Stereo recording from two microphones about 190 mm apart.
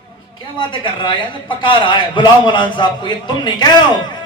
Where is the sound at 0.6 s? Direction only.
25° left (ahead or behind).